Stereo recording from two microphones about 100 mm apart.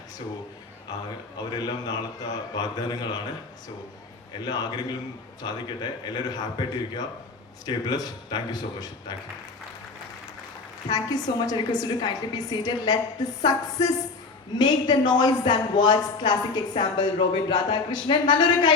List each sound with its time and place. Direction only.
1.5 s a woman's voice: 45° left (ahead or behind)
4.4 s a woman's voice: 45° left (ahead or behind)
10.8 s a woman's voice: 40° left (ahead or behind)